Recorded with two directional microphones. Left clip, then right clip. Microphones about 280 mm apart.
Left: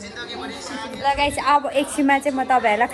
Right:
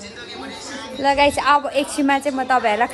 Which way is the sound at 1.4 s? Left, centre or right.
Centre.